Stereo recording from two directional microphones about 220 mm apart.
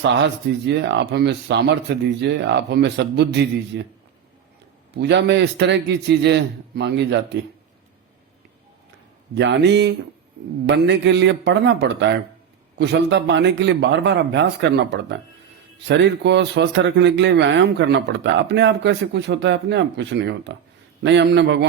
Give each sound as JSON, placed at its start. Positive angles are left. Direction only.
{"t": 0.1, "sound": "a man's voice", "side_deg": -50}
{"t": 4.9, "sound": "a man's voice", "side_deg": -50}
{"t": 9.3, "sound": "a man's voice", "side_deg": -50}